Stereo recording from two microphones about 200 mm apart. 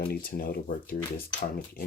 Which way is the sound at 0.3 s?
50° left (ahead or behind).